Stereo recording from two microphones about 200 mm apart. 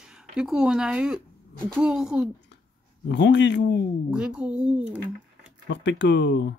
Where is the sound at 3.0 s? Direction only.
60° left (ahead or behind).